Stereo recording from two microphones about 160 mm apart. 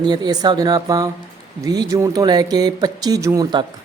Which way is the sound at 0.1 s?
25° right (ahead or behind).